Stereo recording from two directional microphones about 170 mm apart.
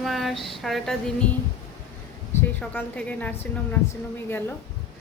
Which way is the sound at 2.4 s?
10° left (ahead or behind).